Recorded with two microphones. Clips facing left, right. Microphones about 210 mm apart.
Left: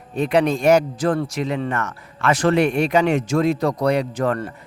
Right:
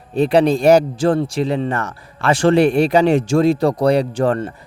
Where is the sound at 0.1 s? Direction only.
30° right (ahead or behind).